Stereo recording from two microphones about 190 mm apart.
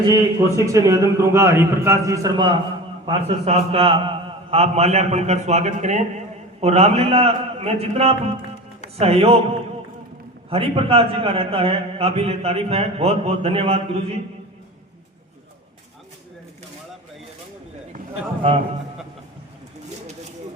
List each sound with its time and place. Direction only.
0.0 s a man's voice: 20° right (ahead or behind)
10.5 s a man's voice: 30° right (ahead or behind)